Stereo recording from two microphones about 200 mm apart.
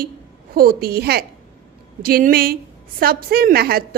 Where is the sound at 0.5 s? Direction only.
45° right (ahead or behind).